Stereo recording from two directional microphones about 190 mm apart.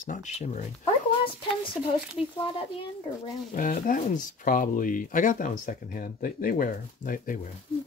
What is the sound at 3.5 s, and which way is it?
Speech, 45° left (ahead or behind).